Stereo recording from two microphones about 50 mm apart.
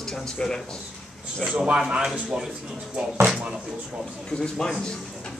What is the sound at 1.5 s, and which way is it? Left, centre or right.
Speech, centre.